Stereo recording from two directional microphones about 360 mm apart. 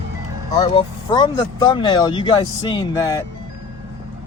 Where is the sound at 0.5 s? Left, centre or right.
Centre.